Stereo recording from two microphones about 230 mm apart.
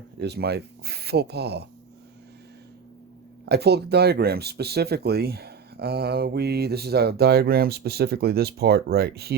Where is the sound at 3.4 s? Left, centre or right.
Right.